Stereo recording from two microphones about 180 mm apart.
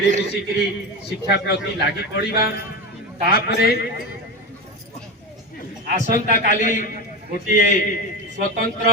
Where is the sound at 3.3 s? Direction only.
65° left (ahead or behind).